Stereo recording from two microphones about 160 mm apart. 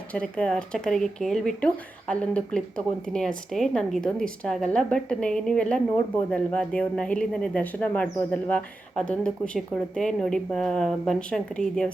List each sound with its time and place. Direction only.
0.1 s speech: 5° left (ahead or behind)